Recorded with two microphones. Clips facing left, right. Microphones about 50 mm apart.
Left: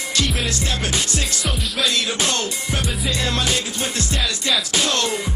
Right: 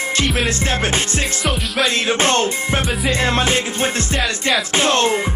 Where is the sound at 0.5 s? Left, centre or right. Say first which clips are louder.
Right 5 dB; right.